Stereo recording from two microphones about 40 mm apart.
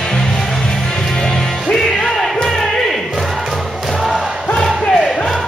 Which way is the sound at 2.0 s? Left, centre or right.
Centre.